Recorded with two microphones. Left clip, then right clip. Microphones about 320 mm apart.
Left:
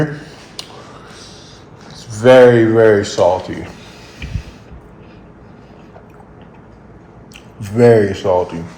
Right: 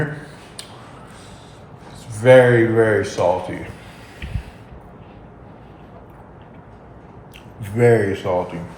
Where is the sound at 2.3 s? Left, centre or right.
Left.